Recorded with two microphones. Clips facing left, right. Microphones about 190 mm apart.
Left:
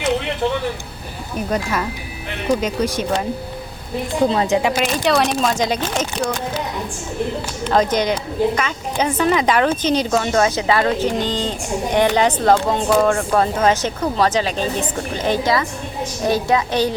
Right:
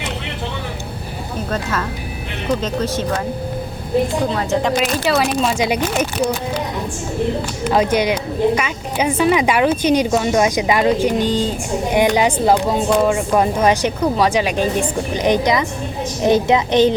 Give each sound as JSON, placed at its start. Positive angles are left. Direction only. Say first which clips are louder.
{"t": 1.5, "sound": "speech", "louder": "left 2 dB", "side_deg": 15}
{"t": 4.4, "sound": "speech", "louder": "left 1 dB", "side_deg": 15}
{"t": 4.8, "sound": "speech", "louder": "even", "side_deg": 0}
{"t": 7.6, "sound": "a woman's voice", "louder": "right 1 dB", "side_deg": -10}